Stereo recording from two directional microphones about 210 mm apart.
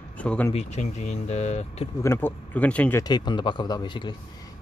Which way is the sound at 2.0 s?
10° left (ahead or behind).